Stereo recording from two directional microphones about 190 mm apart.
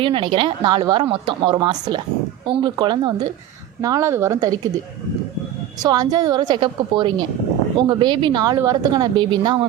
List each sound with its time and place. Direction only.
0.0 s a woman's voice: 25° right (ahead or behind)
5.8 s a woman's voice: 20° right (ahead or behind)